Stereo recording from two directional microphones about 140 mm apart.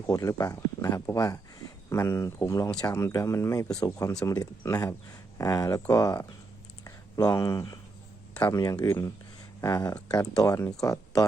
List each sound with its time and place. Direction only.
0.1 s speech: 25° left (ahead or behind)
8.8 s speech: 25° left (ahead or behind)